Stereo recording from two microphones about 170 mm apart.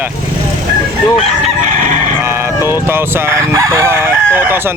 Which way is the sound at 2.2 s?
15° right (ahead or behind).